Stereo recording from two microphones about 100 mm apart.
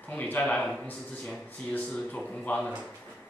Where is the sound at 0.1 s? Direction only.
15° left (ahead or behind).